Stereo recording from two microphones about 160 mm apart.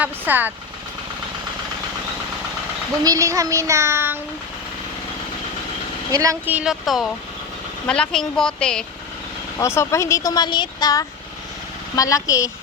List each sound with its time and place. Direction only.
0.0 s speech: 10° right (ahead or behind)
3.0 s child singing: 20° right (ahead or behind)
6.1 s a woman's voice: 20° right (ahead or behind); by 8.8 s 5° left (ahead or behind)
9.6 s speech: 15° left (ahead or behind)